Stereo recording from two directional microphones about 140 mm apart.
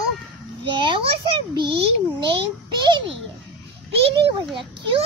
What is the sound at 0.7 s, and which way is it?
Speech, 35° right (ahead or behind).